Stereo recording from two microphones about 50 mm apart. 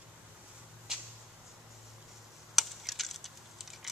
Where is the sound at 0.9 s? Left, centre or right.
Centre.